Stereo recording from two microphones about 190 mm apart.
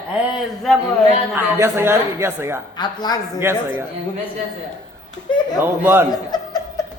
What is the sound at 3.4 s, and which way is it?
Speech, 10° right (ahead or behind).